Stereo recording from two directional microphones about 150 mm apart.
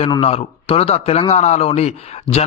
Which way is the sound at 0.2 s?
40° left (ahead or behind).